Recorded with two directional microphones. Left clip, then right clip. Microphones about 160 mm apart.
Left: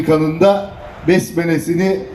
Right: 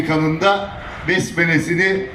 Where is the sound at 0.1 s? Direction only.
45° left (ahead or behind).